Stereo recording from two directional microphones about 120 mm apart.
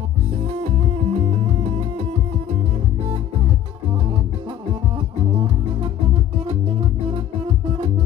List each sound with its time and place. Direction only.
0.6 s music: 65° right (ahead or behind)
4.9 s music: 55° right (ahead or behind)
7.6 s music: 40° right (ahead or behind)